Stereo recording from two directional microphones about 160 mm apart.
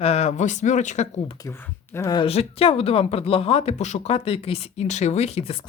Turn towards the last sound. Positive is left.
turn(degrees=40)  # may be behind; listen again after turning